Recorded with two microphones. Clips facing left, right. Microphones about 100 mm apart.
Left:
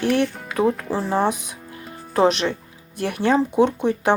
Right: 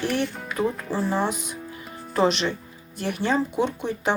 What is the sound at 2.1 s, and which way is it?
Speech, 55° left (ahead or behind).